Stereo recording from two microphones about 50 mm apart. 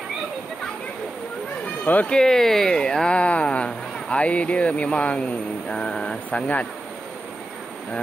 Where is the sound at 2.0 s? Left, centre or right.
Centre.